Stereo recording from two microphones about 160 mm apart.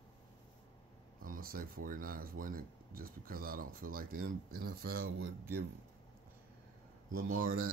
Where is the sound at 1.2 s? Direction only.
65° right (ahead or behind).